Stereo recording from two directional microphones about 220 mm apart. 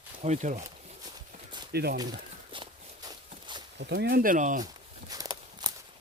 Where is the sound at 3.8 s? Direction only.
50° right (ahead or behind).